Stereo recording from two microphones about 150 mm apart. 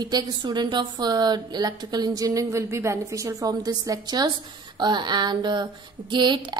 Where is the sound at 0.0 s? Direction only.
30° right (ahead or behind).